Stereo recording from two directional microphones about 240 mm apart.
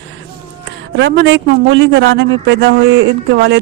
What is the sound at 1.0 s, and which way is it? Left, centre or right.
Speech, right.